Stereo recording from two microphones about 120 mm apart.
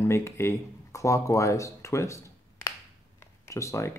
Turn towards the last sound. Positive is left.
turn(degrees=25)  # may be behind; listen again after turning